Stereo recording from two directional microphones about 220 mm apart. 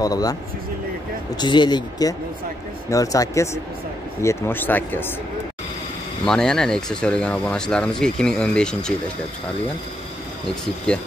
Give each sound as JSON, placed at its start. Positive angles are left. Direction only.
{"t": 0.0, "sound": "speech", "side_deg": 15}
{"t": 1.4, "sound": "speech", "side_deg": 20}
{"t": 6.2, "sound": "speech", "side_deg": 5}
{"t": 10.5, "sound": "speech", "side_deg": 5}